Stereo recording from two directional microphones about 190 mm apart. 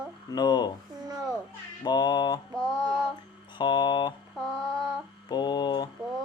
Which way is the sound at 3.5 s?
25° left (ahead or behind).